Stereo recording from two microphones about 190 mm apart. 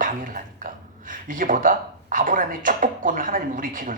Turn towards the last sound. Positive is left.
turn(degrees=-45)  # may be behind; listen again after turning